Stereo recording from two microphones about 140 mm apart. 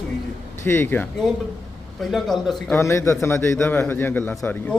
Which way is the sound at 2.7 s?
20° left (ahead or behind).